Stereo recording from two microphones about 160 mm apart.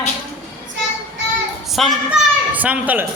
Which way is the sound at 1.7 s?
Centre (ahead or behind).